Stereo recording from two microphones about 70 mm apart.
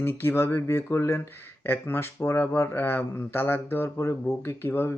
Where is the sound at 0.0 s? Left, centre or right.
Left.